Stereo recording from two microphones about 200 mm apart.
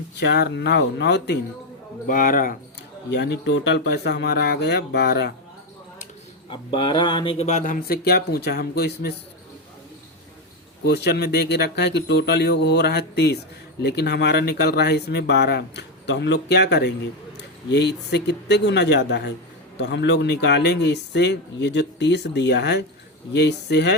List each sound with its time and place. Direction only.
0.2 s speech: 55° left (ahead or behind)
2.0 s speech: 45° left (ahead or behind)
3.1 s speech: 60° left (ahead or behind)
6.5 s speech: 25° left (ahead or behind); by 9.1 s 55° left (ahead or behind)
10.8 s speech: 55° left (ahead or behind)